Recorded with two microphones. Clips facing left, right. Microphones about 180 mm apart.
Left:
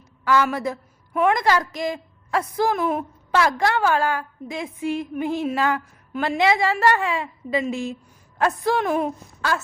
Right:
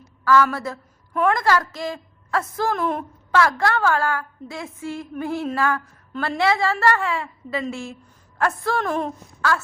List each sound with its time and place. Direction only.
0.3 s a woman's voice: 20° left (ahead or behind)
3.3 s a woman's voice: 15° left (ahead or behind)